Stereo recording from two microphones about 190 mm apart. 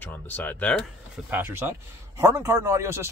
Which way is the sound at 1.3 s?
10° right (ahead or behind).